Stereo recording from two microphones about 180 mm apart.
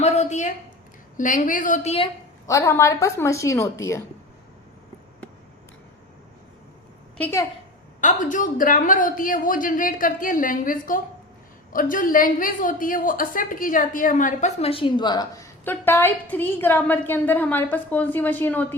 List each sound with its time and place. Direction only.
0.0 s a sound: 40° left (ahead or behind)
1.1 s a woman's voice: 45° left (ahead or behind)
2.5 s a woman's voice: 15° left (ahead or behind)
7.2 s a woman's voice: 15° left (ahead or behind)
8.0 s a woman's voice: 45° left (ahead or behind); by 15.4 s 20° left (ahead or behind)
15.6 s a woman's voice: 10° left (ahead or behind)